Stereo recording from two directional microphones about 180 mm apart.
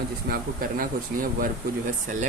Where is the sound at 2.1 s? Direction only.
45° right (ahead or behind).